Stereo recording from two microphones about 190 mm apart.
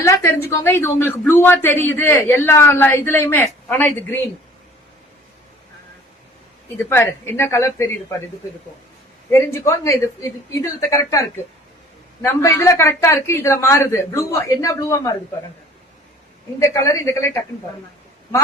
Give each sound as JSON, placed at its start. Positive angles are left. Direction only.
{"t": 0.0, "sound": "a woman's voice", "side_deg": 15}
{"t": 6.9, "sound": "a woman's voice", "side_deg": 10}
{"t": 9.5, "sound": "a woman's voice", "side_deg": 15}
{"t": 12.2, "sound": "a woman's voice", "side_deg": 15}
{"t": 16.6, "sound": "a woman's voice", "side_deg": 15}